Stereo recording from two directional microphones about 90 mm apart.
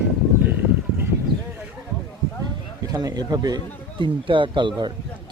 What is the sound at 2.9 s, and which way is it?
Speech, 45° right (ahead or behind).